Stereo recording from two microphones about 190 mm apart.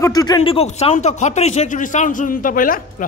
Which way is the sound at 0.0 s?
20° left (ahead or behind).